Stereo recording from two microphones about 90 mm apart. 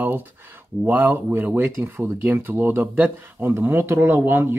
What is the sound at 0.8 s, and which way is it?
Speech, 20° right (ahead or behind).